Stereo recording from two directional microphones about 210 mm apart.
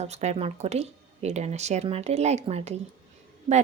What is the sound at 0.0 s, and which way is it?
A woman's voice, 30° right (ahead or behind).